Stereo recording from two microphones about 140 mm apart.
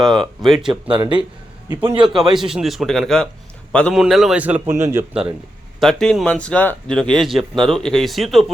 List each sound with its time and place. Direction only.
0.4 s speech: centre (ahead or behind)
0.7 s speech: 35° right (ahead or behind)
2.1 s a man's voice: 5° right (ahead or behind); by 5.0 s 20° right (ahead or behind)
5.8 s speech: 5° left (ahead or behind)